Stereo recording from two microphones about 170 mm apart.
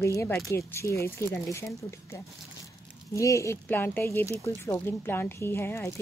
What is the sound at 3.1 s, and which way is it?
A woman's voice, 20° left (ahead or behind).